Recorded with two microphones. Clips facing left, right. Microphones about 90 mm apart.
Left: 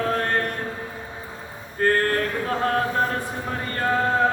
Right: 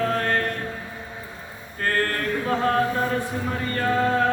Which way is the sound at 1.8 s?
30° left (ahead or behind).